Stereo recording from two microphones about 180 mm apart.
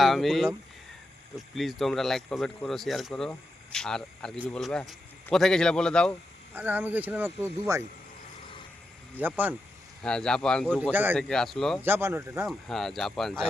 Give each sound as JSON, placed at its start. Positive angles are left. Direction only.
{"t": 0.0, "sound": "speech", "side_deg": 0}
{"t": 6.5, "sound": "speech", "side_deg": -10}
{"t": 9.2, "sound": "speech", "side_deg": -10}
{"t": 10.0, "sound": "speech", "side_deg": 5}
{"t": 10.9, "sound": "speech", "side_deg": -10}
{"t": 11.2, "sound": "speech", "side_deg": 5}
{"t": 11.8, "sound": "speech", "side_deg": -15}
{"t": 12.5, "sound": "speech", "side_deg": 0}